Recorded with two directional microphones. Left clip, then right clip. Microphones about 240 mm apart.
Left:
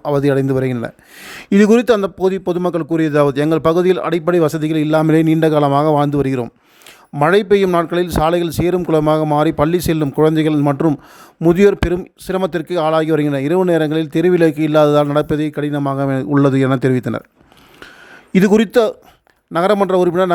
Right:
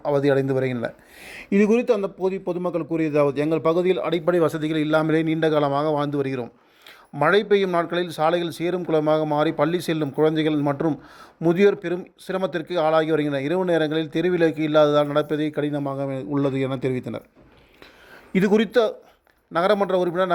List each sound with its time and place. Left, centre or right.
0.0 s speech: left
18.3 s speech: left